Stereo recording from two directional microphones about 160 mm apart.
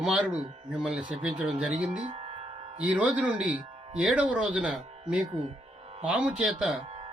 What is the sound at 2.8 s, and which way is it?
Speech, 10° right (ahead or behind).